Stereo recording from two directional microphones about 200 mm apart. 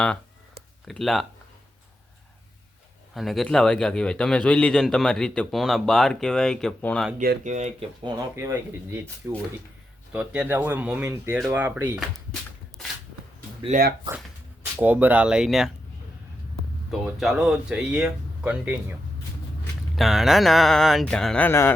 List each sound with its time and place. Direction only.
0.9 s a man's voice: centre (ahead or behind)
3.2 s a man's voice: centre (ahead or behind)
7.2 s speech: 40° right (ahead or behind)
8.0 s speech: 15° right (ahead or behind)
11.3 s a man's voice: centre (ahead or behind)
13.7 s speech: 45° right (ahead or behind)
14.8 s a man's voice: 10° right (ahead or behind)
17.1 s a man's voice: centre (ahead or behind)
20.0 s a man's voice: centre (ahead or behind)